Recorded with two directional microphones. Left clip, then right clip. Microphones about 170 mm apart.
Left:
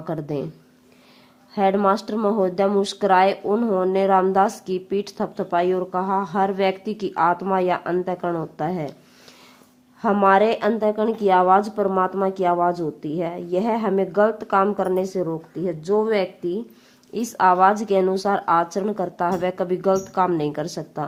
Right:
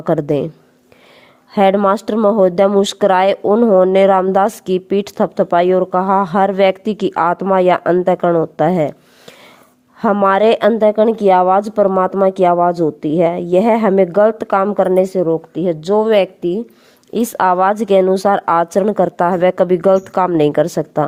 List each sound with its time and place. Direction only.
0.0 s speech: 55° right (ahead or behind)
1.5 s speech: 50° right (ahead or behind)
10.0 s speech: 60° right (ahead or behind)